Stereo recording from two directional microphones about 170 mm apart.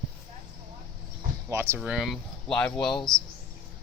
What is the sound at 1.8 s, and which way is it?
Speech, centre (ahead or behind).